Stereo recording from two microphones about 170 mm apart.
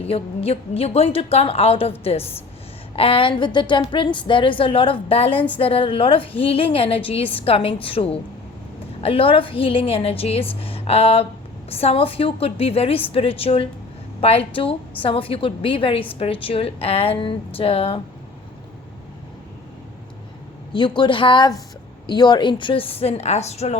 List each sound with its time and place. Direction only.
0.0 s a woman's voice: 35° left (ahead or behind)
20.7 s a woman's voice: 30° left (ahead or behind)